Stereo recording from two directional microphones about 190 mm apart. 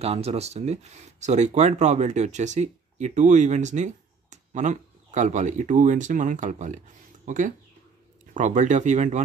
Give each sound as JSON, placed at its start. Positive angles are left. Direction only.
{"t": 0.0, "sound": "speech", "side_deg": -35}